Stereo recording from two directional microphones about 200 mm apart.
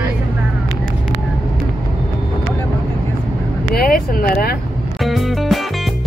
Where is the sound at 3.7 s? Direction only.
45° left (ahead or behind).